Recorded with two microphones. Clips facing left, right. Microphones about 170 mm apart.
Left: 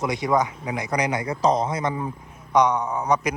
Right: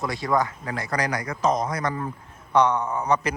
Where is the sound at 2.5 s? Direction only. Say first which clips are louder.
Left 1 dB; 15° left (ahead or behind).